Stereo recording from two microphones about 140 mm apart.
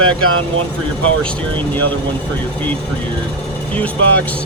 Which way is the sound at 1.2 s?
10° left (ahead or behind).